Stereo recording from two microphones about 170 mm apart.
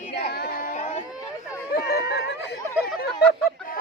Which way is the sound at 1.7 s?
70° left (ahead or behind).